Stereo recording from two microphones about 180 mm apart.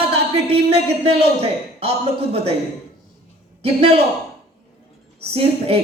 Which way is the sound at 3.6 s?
35° right (ahead or behind).